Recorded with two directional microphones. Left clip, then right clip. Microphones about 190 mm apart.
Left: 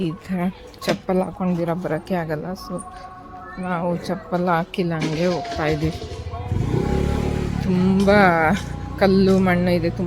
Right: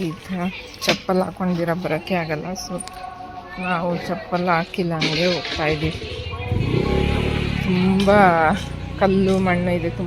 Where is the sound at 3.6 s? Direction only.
15° left (ahead or behind).